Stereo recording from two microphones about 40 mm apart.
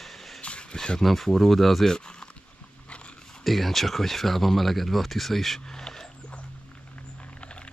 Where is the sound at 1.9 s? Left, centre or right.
Left.